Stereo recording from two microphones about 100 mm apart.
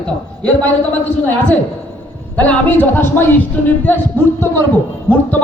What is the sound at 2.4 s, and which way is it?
A man's voice, 15° left (ahead or behind).